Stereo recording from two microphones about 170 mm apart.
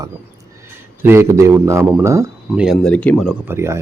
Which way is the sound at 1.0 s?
15° right (ahead or behind).